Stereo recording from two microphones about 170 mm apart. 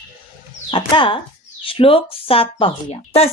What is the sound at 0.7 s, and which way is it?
Speech, 30° left (ahead or behind).